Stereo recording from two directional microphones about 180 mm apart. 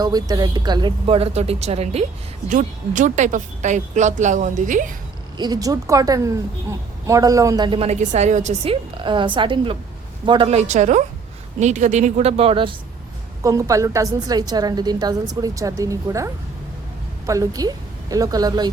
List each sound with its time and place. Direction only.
0.0 s a woman's voice: 20° right (ahead or behind); by 4.9 s 45° right (ahead or behind)
5.4 s a woman's voice: 20° right (ahead or behind)
13.4 s a woman's voice: 20° right (ahead or behind)